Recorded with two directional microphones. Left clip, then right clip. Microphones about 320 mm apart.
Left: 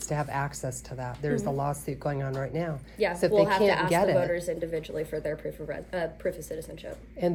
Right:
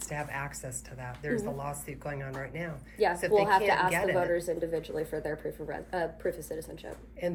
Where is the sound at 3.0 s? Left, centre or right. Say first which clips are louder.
Left 2 dB; centre.